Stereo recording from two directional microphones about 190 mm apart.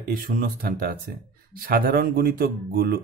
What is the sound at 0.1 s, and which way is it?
Speech, 50° right (ahead or behind).